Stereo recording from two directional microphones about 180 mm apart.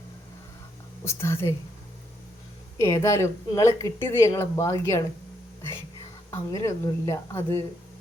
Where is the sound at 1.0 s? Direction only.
15° left (ahead or behind).